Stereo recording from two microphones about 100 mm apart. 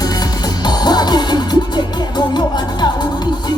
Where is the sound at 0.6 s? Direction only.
45° left (ahead or behind).